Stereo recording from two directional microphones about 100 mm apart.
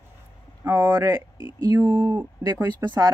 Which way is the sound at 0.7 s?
30° right (ahead or behind).